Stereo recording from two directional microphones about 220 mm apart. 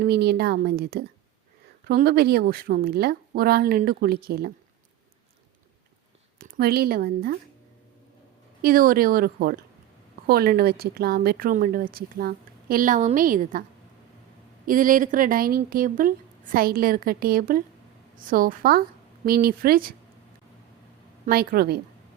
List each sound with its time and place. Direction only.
0.0 s speech: 45° right (ahead or behind)
6.4 s speech: 45° right (ahead or behind)
8.6 s speech: 40° right (ahead or behind)
14.7 s speech: 40° right (ahead or behind)
21.2 s speech: 45° right (ahead or behind)